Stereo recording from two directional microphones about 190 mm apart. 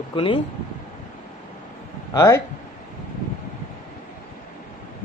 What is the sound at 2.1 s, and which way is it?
Speech, 20° left (ahead or behind).